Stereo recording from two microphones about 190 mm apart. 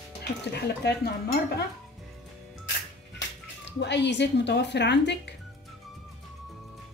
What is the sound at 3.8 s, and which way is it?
Speech, 65° left (ahead or behind).